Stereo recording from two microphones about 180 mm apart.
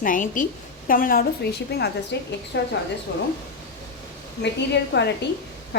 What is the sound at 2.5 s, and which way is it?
Speech, 90° left.